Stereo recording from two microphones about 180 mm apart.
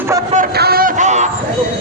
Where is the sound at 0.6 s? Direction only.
55° right (ahead or behind); by 1.3 s 40° right (ahead or behind).